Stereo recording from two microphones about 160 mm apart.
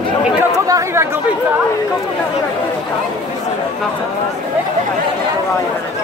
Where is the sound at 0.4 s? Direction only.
20° right (ahead or behind).